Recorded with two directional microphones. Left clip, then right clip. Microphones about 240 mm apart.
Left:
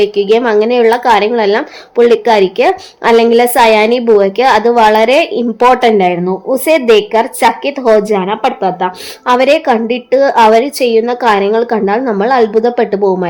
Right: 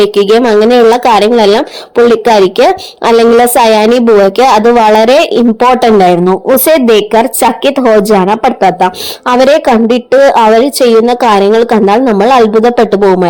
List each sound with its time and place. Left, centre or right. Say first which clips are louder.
0.0 s a woman's voice: right 4 dB; right